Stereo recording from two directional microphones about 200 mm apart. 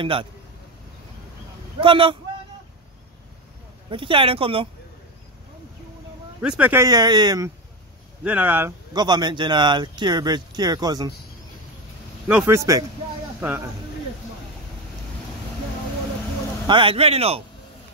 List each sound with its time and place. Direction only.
0.0 s speech: 25° right (ahead or behind)
1.8 s speech: 25° right (ahead or behind)
3.9 s speech: 25° right (ahead or behind)
6.4 s speech: 5° right (ahead or behind)
8.2 s speech: 5° right (ahead or behind)
8.9 s speech: 20° right (ahead or behind)
12.3 s speech: 10° right (ahead or behind)
16.6 s speech: 25° right (ahead or behind)